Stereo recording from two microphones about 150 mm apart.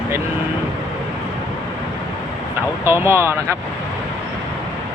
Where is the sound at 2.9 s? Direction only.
15° right (ahead or behind).